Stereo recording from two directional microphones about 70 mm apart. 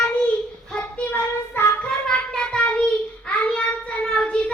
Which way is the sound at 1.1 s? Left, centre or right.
Left.